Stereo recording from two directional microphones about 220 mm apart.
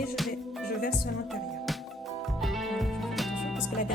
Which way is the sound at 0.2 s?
Centre (ahead or behind).